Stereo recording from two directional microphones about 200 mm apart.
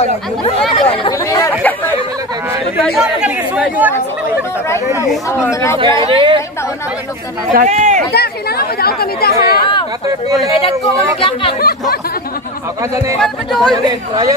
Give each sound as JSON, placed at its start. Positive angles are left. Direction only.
{"t": 0.7, "sound": "speech", "side_deg": 30}
{"t": 1.1, "sound": "speech", "side_deg": 15}
{"t": 2.8, "sound": "speech", "side_deg": 0}
{"t": 5.5, "sound": "speech", "side_deg": 15}
{"t": 6.0, "sound": "speech", "side_deg": -25}
{"t": 7.5, "sound": "speech", "side_deg": -35}
{"t": 8.1, "sound": "speech", "side_deg": 50}
{"t": 10.2, "sound": "speech", "side_deg": -15}
{"t": 11.1, "sound": "speech", "side_deg": 25}
{"t": 13.2, "sound": "speech", "side_deg": 5}
{"t": 13.8, "sound": "speech", "side_deg": -20}